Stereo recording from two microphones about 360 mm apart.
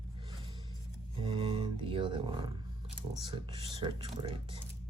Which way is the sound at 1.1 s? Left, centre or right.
Centre.